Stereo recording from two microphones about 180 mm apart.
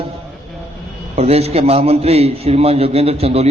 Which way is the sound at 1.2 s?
35° right (ahead or behind).